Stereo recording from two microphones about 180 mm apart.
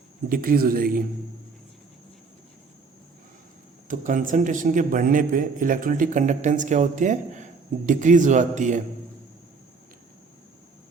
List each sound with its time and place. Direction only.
0.3 s a man's voice: 55° right (ahead or behind)
3.8 s a man's voice: 45° right (ahead or behind)